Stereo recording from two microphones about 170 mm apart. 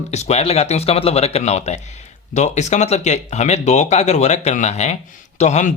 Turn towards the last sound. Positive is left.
turn(degrees=45)  # may be behind; listen again after turning